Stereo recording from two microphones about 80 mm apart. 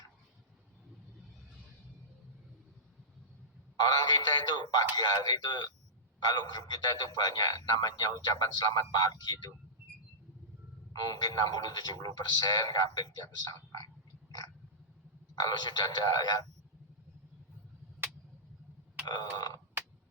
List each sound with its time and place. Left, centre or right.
3.8 s speech: left
11.1 s speech: left
15.4 s speech: left
19.0 s burping: left